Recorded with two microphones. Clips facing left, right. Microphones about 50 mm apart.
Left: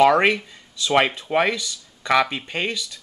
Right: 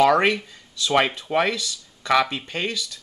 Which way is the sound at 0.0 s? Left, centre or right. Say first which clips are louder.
Left 2 dB; centre.